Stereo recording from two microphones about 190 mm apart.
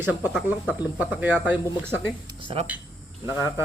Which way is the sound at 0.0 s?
10° right (ahead or behind).